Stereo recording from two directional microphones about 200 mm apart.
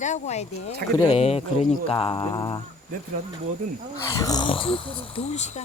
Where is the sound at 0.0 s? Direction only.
35° left (ahead or behind).